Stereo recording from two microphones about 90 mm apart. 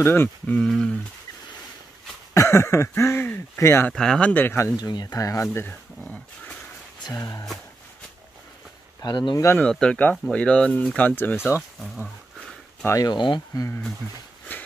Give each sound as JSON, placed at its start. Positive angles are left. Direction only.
{"t": 0.0, "sound": "speech", "side_deg": 25}
{"t": 0.6, "sound": "speech", "side_deg": 10}
{"t": 2.3, "sound": "speech", "side_deg": 30}
{"t": 3.9, "sound": "speech", "side_deg": 10}
{"t": 4.7, "sound": "speech", "side_deg": 45}
{"t": 7.2, "sound": "speech", "side_deg": 40}
{"t": 9.0, "sound": "speech", "side_deg": 50}
{"t": 9.6, "sound": "speech", "side_deg": 10}
{"t": 12.8, "sound": "speech", "side_deg": 35}
{"t": 13.1, "sound": "speech", "side_deg": 60}
{"t": 14.5, "sound": "a sound", "side_deg": 20}